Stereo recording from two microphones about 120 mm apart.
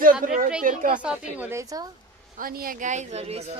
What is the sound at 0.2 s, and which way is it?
Speech, 90° right.